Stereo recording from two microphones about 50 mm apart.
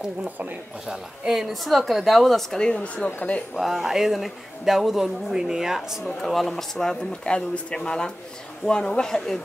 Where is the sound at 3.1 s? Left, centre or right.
Left.